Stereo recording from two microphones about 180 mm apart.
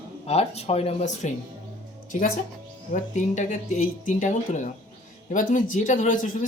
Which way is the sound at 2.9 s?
45° left (ahead or behind).